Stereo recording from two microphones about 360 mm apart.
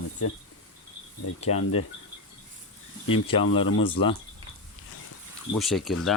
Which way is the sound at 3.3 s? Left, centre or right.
Centre.